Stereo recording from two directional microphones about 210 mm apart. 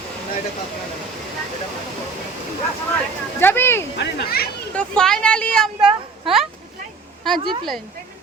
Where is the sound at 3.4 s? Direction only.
10° left (ahead or behind).